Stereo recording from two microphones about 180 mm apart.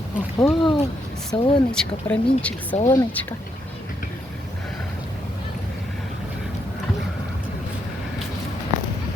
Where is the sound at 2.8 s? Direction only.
20° left (ahead or behind).